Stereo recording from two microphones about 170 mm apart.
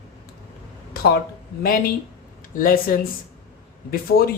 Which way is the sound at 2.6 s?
55° left (ahead or behind).